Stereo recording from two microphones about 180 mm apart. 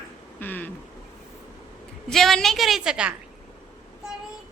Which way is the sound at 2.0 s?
Centre (ahead or behind).